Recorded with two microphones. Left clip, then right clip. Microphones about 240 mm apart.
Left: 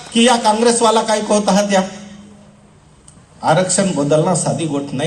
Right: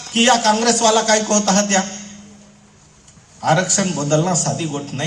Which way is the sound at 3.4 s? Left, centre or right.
Left.